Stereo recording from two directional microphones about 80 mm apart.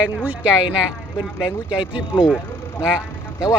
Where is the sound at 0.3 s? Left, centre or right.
Centre.